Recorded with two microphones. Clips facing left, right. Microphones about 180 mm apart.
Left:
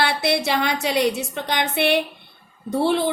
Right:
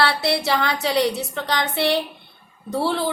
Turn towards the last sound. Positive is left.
turn(degrees=20)  # may be behind; listen again after turning